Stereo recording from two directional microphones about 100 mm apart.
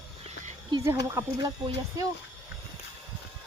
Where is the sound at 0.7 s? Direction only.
50° right (ahead or behind).